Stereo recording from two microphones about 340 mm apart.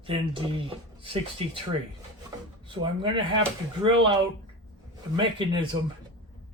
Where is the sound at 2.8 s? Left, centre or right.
Centre.